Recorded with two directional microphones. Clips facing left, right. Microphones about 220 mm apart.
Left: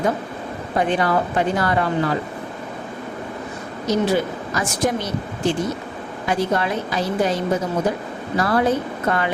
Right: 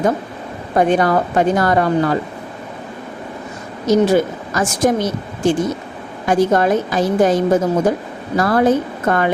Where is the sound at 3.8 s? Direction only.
45° right (ahead or behind).